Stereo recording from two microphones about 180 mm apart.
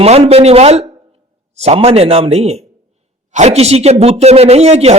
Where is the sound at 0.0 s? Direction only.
35° right (ahead or behind).